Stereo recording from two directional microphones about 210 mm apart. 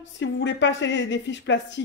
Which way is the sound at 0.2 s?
60° left (ahead or behind).